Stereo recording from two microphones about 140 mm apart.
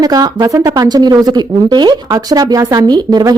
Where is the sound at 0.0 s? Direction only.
25° right (ahead or behind).